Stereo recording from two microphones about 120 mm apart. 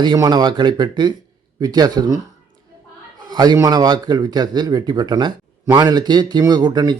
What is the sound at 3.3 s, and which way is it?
A man's voice, 35° right (ahead or behind).